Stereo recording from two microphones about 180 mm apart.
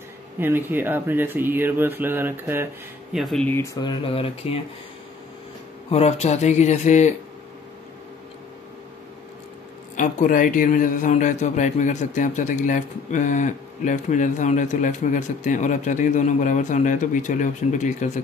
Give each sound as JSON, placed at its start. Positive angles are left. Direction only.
{"t": 0.4, "sound": "speech", "side_deg": -10}
{"t": 3.8, "sound": "speech", "side_deg": 30}
{"t": 5.9, "sound": "speech", "side_deg": 35}
{"t": 9.9, "sound": "a man's voice", "side_deg": 45}